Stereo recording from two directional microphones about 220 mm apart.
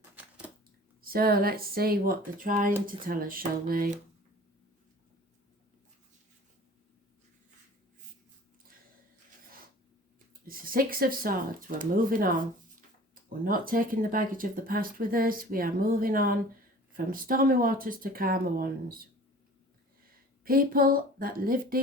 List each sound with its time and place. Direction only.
0.2 s typewriter: 5° right (ahead or behind)
1.0 s speech: 40° right (ahead or behind)
10.4 s speech: 40° right (ahead or behind)
20.4 s speech: 40° right (ahead or behind)